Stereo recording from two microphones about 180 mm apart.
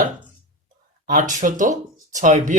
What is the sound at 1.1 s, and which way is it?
Speech, 45° right (ahead or behind).